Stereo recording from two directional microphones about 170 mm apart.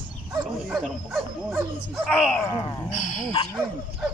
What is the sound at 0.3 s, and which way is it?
Dog, 20° right (ahead or behind).